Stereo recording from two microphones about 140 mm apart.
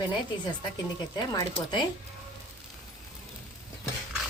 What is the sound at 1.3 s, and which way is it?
Speech, 35° left (ahead or behind).